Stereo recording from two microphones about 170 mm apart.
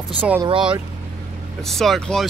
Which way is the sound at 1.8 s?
Centre (ahead or behind).